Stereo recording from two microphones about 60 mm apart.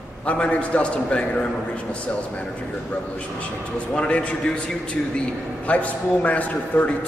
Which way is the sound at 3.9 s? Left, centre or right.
Left.